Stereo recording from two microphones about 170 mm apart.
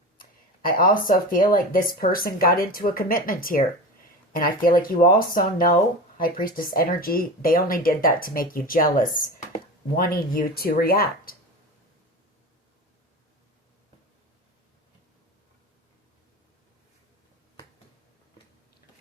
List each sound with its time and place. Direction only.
0.2 s speech: 55° left (ahead or behind)
9.9 s speech: 60° left (ahead or behind)